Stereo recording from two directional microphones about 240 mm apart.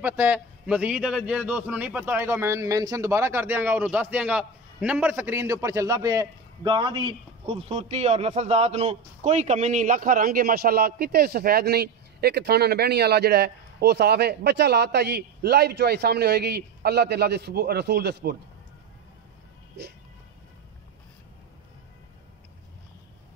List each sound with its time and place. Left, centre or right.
0.0 s a man's voice: centre; by 18.3 s right
19.8 s music: right